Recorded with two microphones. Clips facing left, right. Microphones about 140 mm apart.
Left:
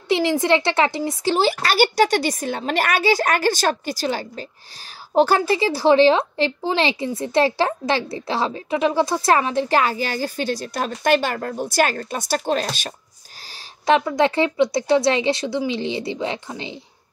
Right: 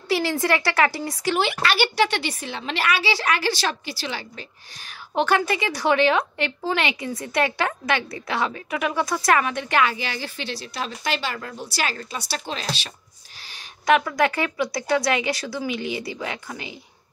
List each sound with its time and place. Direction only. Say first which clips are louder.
0.1 s speech: left 4 dB; 20° left (ahead or behind); by 12.9 s 50° left (ahead or behind)
13.5 s a woman's voice: left 1 dB; 30° left (ahead or behind)